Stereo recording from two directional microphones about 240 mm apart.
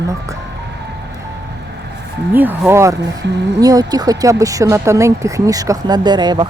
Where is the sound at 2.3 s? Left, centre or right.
Centre.